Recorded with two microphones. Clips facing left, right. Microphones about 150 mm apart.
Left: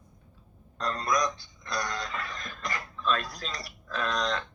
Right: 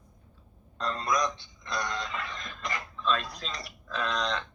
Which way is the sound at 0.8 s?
25° right (ahead or behind).